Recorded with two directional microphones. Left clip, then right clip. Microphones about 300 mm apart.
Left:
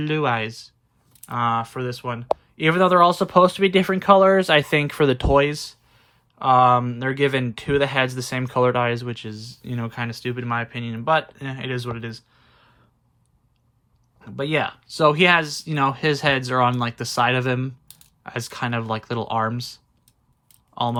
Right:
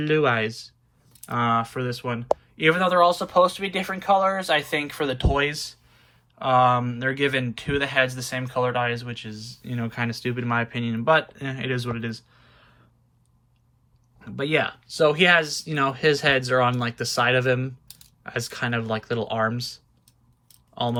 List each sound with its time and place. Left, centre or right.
0.0 s speech: centre
14.2 s speech: centre